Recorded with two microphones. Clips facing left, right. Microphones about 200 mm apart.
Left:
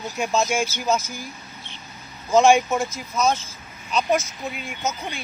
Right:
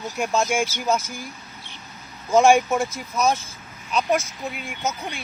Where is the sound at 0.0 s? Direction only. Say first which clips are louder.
Even; centre (ahead or behind).